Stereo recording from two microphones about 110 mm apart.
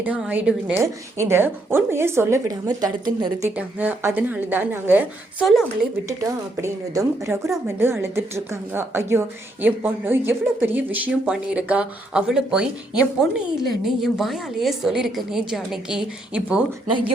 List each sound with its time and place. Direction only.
0.0 s a woman's voice: 15° right (ahead or behind)
2.6 s a woman's voice: 40° right (ahead or behind)
3.5 s a woman's voice: 15° right (ahead or behind)
5.5 s speech: 5° right (ahead or behind)
6.1 s a woman's voice: 30° right (ahead or behind); by 16.6 s 10° right (ahead or behind)